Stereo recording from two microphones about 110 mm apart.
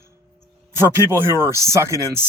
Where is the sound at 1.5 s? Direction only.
25° right (ahead or behind).